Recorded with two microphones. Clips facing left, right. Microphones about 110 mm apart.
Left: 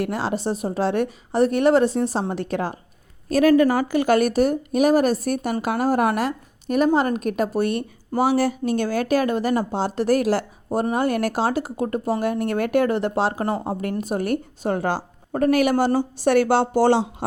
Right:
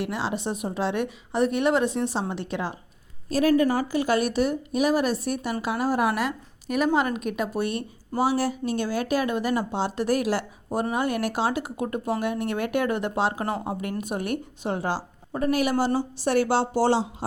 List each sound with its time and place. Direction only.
0.0 s a woman's voice: 45° left (ahead or behind)
3.2 s a woman's voice: 60° left (ahead or behind)